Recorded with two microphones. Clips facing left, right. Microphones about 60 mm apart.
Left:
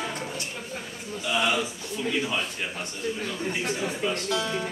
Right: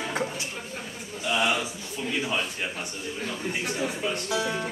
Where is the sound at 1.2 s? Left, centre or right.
Centre.